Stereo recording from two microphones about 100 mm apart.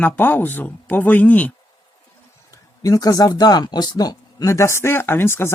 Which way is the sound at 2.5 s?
35° left (ahead or behind).